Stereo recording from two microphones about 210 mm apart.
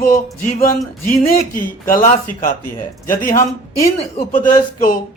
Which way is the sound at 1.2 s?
40° left (ahead or behind).